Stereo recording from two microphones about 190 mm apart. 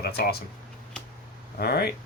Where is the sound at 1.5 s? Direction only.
55° left (ahead or behind).